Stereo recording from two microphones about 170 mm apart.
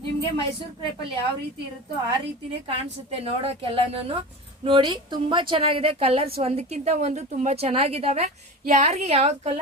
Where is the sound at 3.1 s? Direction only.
35° right (ahead or behind).